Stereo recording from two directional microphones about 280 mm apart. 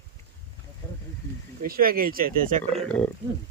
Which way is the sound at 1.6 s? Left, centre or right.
Right.